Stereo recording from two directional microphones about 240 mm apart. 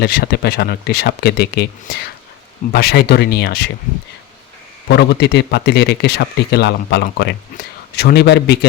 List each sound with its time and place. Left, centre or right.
0.0 s speech: left
4.9 s a man's voice: left